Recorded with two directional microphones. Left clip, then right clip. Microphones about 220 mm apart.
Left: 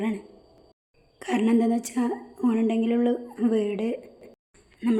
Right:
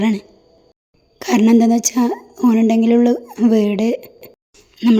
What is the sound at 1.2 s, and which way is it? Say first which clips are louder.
A woman's voice: right 10 dB; 40° right (ahead or behind).